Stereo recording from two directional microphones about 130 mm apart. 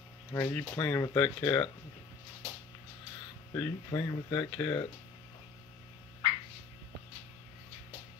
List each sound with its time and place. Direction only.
0.3 s speech: 15° left (ahead or behind)
3.5 s speech: 15° left (ahead or behind)
4.1 s speech: 30° left (ahead or behind)
4.6 s speech: 15° left (ahead or behind)